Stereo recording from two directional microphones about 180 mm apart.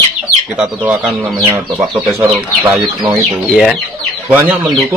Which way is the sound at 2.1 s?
25° right (ahead or behind).